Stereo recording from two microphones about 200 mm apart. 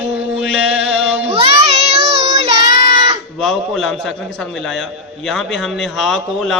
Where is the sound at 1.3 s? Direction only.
30° right (ahead or behind).